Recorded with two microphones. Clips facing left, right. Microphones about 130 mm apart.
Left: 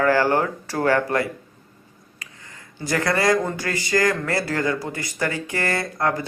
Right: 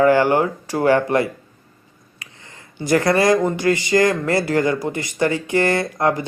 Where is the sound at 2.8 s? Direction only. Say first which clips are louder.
Right 5 dB; 25° right (ahead or behind).